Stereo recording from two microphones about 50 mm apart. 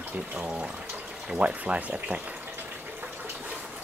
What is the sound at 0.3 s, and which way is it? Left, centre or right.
Speech, right.